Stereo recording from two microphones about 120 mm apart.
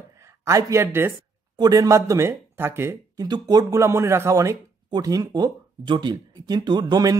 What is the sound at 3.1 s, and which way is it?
Speech, 35° right (ahead or behind).